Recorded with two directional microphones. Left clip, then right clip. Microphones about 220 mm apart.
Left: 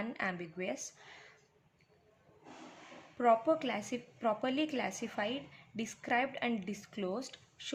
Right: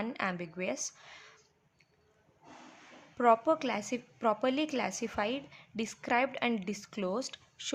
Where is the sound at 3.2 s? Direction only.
25° right (ahead or behind).